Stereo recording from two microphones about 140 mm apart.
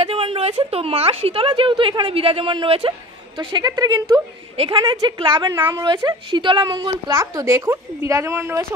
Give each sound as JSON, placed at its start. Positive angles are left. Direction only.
{"t": 0.0, "sound": "a woman's voice", "side_deg": -40}